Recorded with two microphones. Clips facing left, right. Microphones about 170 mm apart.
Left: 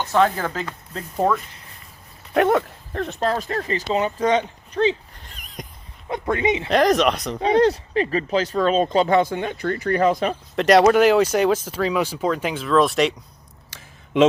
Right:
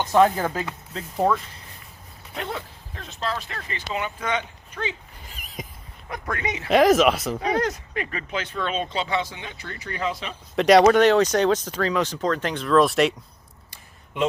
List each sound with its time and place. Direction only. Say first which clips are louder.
0.0 s speech: right 1 dB; 15° right (ahead or behind)
2.3 s speech: left 14 dB; 70° left (ahead or behind); by 4.9 s 35° left (ahead or behind)
5.2 s a sound: even; 5° right (ahead or behind)
6.1 s speech: left 8 dB; 25° left (ahead or behind)
6.7 s speech: right 3 dB; 5° right (ahead or behind)
7.4 s speech: left 9 dB; 30° left (ahead or behind); by 10.3 s 50° left (ahead or behind)
10.5 s speech: even; centre (ahead or behind)
13.7 s a sound: left 6 dB; 90° left